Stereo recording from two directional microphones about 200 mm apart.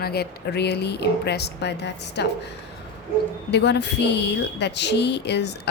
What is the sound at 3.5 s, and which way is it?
Speech, 60° left (ahead or behind).